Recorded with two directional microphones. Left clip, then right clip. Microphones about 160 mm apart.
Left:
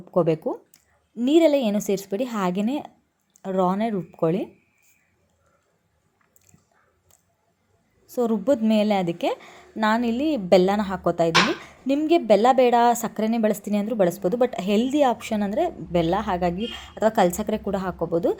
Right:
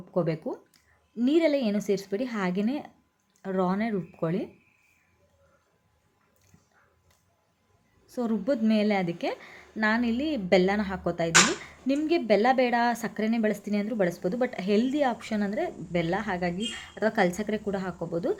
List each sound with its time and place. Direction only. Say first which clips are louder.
0.1 s a woman's voice: left 7 dB; 25° left (ahead or behind)
8.0 s a woman's voice: left 7 dB; 20° left (ahead or behind)